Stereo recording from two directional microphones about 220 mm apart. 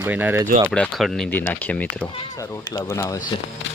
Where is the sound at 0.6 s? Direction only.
5° left (ahead or behind).